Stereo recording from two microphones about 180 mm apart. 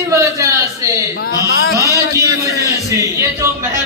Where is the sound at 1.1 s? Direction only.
65° left (ahead or behind).